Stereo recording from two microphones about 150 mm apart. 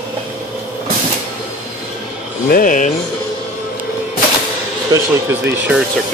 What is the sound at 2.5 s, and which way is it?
Speech, 65° left (ahead or behind).